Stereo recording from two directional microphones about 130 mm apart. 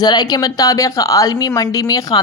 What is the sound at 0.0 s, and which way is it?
A woman's voice, 30° left (ahead or behind).